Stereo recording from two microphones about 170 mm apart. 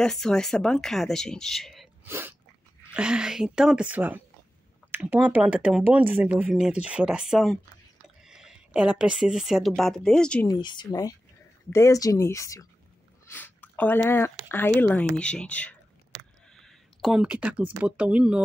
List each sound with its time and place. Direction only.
0.0 s speech: 5° left (ahead or behind)
2.0 s speech: 15° right (ahead or behind); by 10.5 s 5° left (ahead or behind)
10.5 s speech: 25° left (ahead or behind); by 15.7 s 10° left (ahead or behind)
16.5 s a sound: centre (ahead or behind)
17.7 s speech: 5° right (ahead or behind)